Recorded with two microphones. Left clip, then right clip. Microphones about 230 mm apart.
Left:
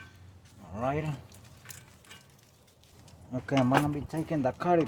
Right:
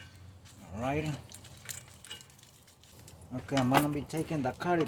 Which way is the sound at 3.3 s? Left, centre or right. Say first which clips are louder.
Left 2 dB; left.